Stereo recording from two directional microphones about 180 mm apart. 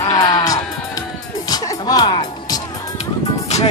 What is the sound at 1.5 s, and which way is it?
Music, 20° left (ahead or behind).